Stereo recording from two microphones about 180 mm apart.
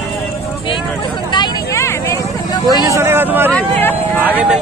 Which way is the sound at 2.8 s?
15° right (ahead or behind).